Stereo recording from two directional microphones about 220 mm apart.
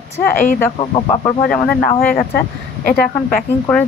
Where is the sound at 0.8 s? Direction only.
20° left (ahead or behind).